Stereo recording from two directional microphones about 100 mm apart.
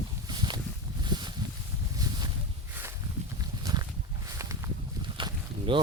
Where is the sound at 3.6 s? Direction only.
40° right (ahead or behind).